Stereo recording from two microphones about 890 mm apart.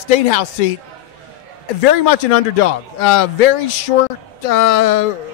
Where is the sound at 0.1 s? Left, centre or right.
Left.